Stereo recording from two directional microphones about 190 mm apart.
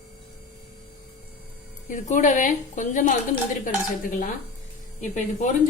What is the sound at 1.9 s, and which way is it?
A woman's voice, 45° left (ahead or behind).